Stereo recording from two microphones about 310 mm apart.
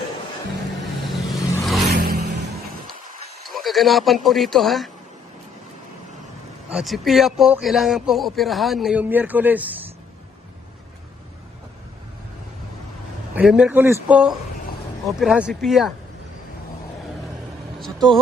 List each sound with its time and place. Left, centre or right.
1.0 s vehicle: centre
1.9 s a sound: right
3.4 s speech: centre
6.7 s a man's voice: centre
13.3 s a man's voice: centre